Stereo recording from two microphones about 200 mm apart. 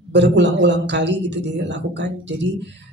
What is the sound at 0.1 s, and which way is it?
Speech, 60° right (ahead or behind).